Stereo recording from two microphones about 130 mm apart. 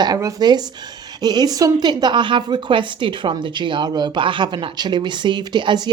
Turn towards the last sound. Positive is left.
turn(degrees=-35)  # may be behind; listen again after turning